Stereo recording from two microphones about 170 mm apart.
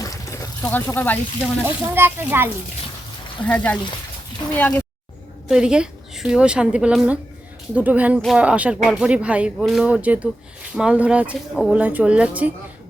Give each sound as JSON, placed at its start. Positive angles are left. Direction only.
{"t": 0.0, "sound": "a sound", "side_deg": 20}
{"t": 1.6, "sound": "speech", "side_deg": -15}
{"t": 3.4, "sound": "speech", "side_deg": 10}
{"t": 5.5, "sound": "a woman's voice", "side_deg": -5}